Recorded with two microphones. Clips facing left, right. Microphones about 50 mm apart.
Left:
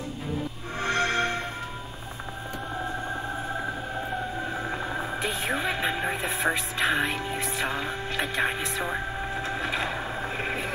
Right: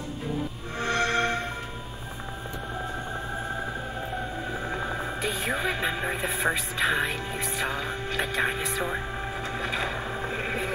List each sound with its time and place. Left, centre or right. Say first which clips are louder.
0.7 s music: even; left
4.6 s music: even; centre
5.2 s speech: even; centre
8.2 s speech: even; centre
9.4 s vehicle: left 1 dB; centre